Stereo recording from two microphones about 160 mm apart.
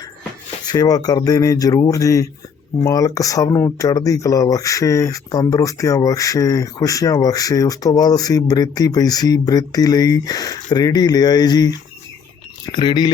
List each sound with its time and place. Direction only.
0.6 s speech: 25° left (ahead or behind)